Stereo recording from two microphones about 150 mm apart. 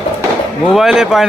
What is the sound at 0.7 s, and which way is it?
Speech, centre (ahead or behind).